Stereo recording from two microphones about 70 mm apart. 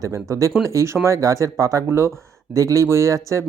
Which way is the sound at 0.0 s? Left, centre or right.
Right.